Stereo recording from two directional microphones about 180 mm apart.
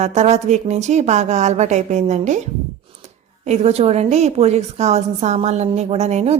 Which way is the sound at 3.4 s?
35° right (ahead or behind).